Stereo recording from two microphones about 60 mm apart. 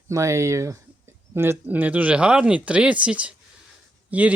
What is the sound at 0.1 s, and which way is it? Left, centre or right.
Speech, right.